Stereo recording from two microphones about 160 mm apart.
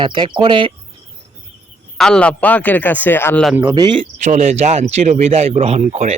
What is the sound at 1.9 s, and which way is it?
Speech, 5° left (ahead or behind).